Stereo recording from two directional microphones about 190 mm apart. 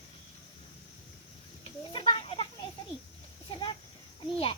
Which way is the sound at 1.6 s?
25° left (ahead or behind).